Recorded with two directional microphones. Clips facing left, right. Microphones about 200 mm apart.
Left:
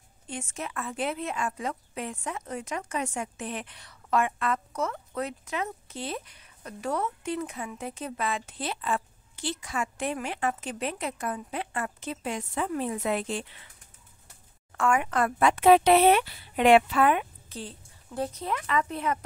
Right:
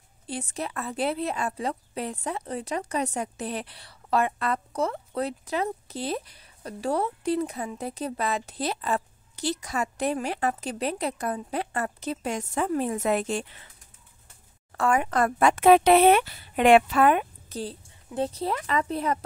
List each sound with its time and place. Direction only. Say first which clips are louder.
0.3 s a woman's voice: right 4 dB; 35° right (ahead or behind)
14.7 s speech: right 2 dB; 35° right (ahead or behind)
18.1 s a woman's voice: right 3 dB; 30° right (ahead or behind)